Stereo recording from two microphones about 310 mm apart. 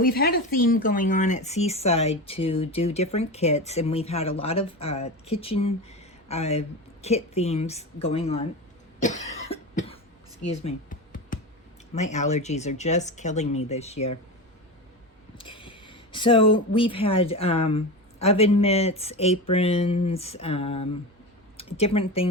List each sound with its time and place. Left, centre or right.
0.0 s speech: left
9.0 s cough: left
10.8 s computer keyboard: left
11.9 s speech: left
15.4 s speech: centre